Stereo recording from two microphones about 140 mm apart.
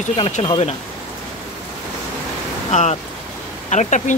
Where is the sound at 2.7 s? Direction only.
55° left (ahead or behind).